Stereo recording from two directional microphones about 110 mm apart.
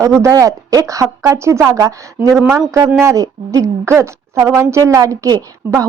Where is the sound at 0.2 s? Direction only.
30° right (ahead or behind).